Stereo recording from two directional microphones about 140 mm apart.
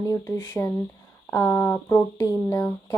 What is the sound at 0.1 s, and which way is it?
Speech, 25° left (ahead or behind).